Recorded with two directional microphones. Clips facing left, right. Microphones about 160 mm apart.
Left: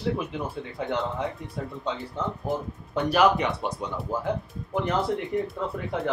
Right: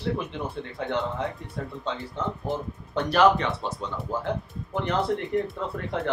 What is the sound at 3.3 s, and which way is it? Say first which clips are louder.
Speech: left 1 dB; 15° left (ahead or behind).